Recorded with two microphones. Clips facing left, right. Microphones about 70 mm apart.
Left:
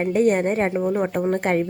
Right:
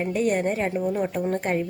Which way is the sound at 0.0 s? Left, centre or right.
Left.